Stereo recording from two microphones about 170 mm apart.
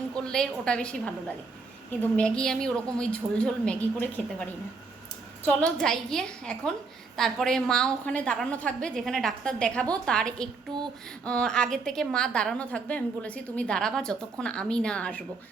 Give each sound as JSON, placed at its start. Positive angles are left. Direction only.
{"t": 0.2, "sound": "a woman's voice", "side_deg": 5}
{"t": 5.5, "sound": "a woman's voice", "side_deg": 5}
{"t": 10.7, "sound": "child singing", "side_deg": -25}
{"t": 11.3, "sound": "a woman's voice", "side_deg": 5}